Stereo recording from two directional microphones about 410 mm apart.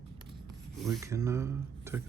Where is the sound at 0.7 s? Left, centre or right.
Centre.